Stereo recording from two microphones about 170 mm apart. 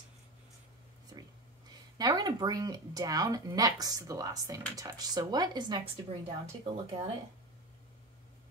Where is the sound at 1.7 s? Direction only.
25° right (ahead or behind).